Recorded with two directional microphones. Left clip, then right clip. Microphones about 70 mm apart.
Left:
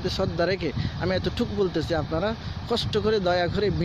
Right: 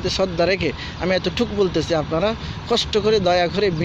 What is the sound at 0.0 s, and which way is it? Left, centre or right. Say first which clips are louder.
Speech: right 6 dB; left.